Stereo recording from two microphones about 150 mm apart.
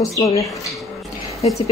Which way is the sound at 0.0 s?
20° left (ahead or behind).